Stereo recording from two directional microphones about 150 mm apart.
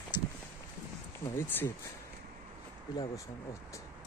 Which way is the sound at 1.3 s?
15° left (ahead or behind).